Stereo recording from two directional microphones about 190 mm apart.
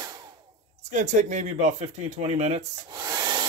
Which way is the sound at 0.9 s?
40° right (ahead or behind).